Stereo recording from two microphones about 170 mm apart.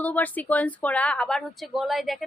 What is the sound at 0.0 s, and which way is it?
Speech, 10° left (ahead or behind).